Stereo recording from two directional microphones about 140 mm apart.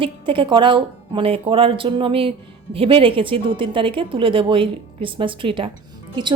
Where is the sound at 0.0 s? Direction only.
35° right (ahead or behind).